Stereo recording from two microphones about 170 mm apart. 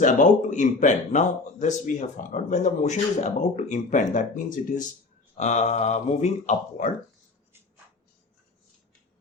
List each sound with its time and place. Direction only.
0.0 s speech: 50° left (ahead or behind)